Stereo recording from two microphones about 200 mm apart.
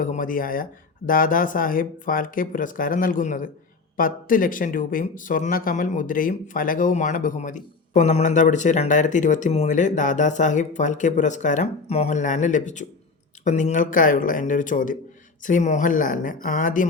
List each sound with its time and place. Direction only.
0.0 s speech: 45° left (ahead or behind)